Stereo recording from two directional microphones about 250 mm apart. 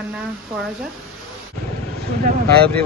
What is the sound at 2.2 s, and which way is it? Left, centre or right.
Speech, right.